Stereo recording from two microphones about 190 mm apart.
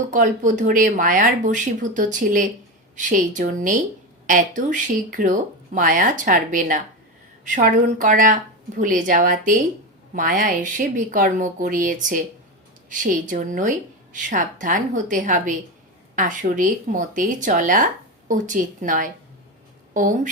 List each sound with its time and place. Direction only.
0.1 s speech: 40° right (ahead or behind)